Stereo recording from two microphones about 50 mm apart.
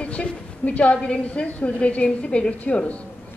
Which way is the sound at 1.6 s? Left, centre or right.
Left.